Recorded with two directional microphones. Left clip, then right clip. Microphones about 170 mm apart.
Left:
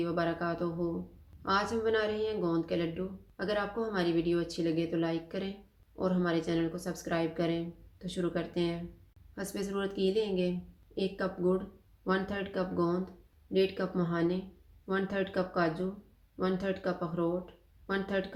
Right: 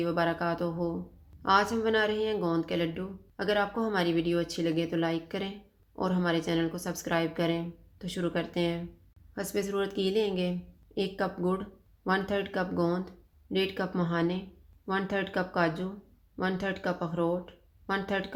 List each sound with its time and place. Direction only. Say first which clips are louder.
0.0 s speech: right 3 dB; 45° right (ahead or behind)